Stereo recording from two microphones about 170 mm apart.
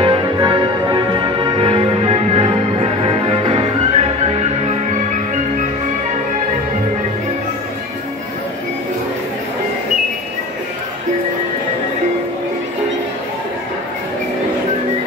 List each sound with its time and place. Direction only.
0.0 s music: 25° right (ahead or behind); by 5.7 s 45° right (ahead or behind)